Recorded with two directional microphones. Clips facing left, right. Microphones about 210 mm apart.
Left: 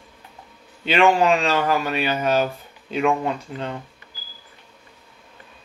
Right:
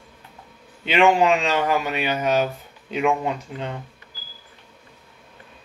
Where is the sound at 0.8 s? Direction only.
15° right (ahead or behind).